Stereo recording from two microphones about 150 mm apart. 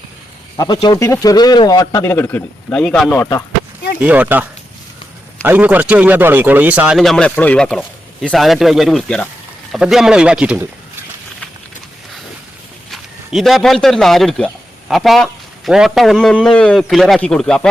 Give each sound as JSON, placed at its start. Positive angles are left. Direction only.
{"t": 0.5, "sound": "a man's voice", "side_deg": 30}
{"t": 4.0, "sound": "a man's voice", "side_deg": -10}
{"t": 12.9, "sound": "a man's voice", "side_deg": 0}